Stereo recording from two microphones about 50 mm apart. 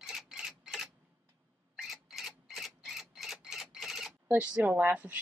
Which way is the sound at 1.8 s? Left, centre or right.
Centre.